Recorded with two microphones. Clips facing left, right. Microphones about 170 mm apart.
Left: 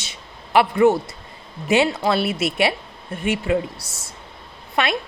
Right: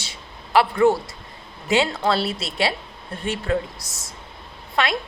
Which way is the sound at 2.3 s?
30° right (ahead or behind).